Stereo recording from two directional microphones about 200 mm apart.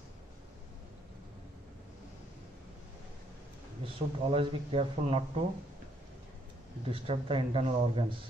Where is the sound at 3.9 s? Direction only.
25° right (ahead or behind).